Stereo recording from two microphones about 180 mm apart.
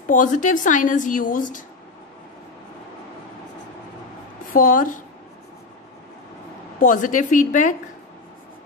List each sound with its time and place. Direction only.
0.1 s a woman's voice: 45° left (ahead or behind)
4.6 s a woman's voice: 50° left (ahead or behind)
6.8 s a woman's voice: 45° left (ahead or behind)